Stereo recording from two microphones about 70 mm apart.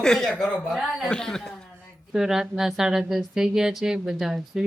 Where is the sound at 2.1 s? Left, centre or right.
Centre.